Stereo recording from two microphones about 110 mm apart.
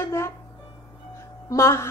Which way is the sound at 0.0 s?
25° left (ahead or behind).